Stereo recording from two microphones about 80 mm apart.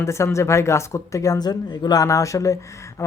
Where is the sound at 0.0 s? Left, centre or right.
Left.